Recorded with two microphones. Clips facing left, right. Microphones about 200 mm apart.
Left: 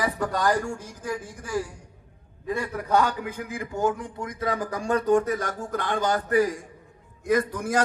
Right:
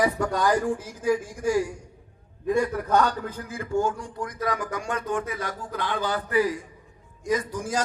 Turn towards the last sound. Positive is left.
turn(degrees=60)  # may be behind; listen again after turning